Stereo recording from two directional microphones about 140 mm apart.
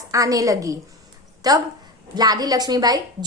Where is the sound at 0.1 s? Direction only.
25° right (ahead or behind).